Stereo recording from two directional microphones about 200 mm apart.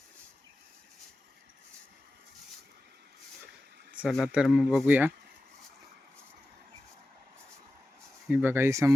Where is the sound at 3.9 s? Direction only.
Centre (ahead or behind).